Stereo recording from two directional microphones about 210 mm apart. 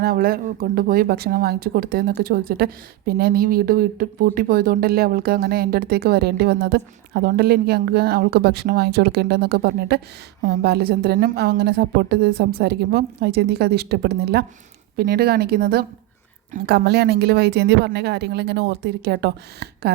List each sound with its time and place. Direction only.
0.0 s speech: 45° right (ahead or behind)